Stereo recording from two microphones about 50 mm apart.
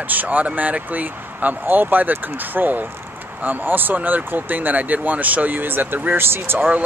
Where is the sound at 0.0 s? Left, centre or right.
Right.